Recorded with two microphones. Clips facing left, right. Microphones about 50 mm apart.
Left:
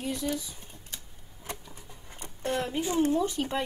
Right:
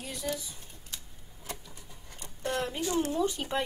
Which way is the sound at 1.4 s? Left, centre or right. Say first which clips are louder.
Left 2 dB; centre.